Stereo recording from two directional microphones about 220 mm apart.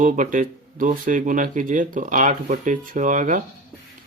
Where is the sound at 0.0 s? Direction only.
35° right (ahead or behind).